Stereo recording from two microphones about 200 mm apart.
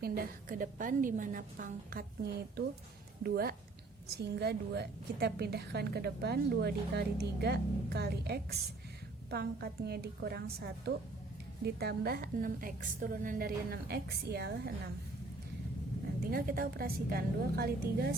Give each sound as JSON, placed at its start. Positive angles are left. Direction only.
{"t": 0.0, "sound": "a woman's voice", "side_deg": -50}
{"t": 16.3, "sound": "a woman's voice", "side_deg": -45}